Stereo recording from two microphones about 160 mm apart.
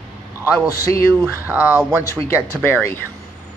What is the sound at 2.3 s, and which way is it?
Speech, 15° left (ahead or behind).